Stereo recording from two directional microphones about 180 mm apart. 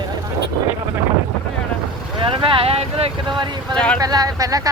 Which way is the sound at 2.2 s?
30° right (ahead or behind).